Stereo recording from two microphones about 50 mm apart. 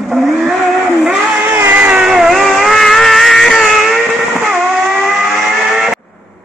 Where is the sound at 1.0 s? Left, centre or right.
Centre.